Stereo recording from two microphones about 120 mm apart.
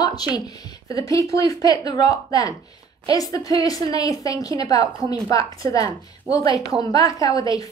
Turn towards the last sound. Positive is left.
turn(degrees=30)  # may be behind; listen again after turning